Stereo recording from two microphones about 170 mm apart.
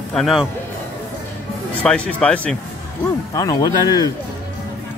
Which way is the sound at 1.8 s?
5° left (ahead or behind).